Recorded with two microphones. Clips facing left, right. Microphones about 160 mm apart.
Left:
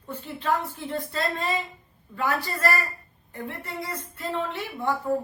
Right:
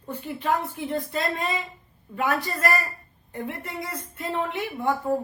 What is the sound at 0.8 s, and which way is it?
A woman's voice, 20° right (ahead or behind).